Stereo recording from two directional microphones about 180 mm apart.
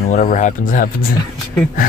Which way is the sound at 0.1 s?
45° left (ahead or behind).